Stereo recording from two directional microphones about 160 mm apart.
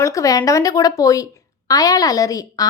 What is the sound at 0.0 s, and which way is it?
A woman's voice, 20° left (ahead or behind).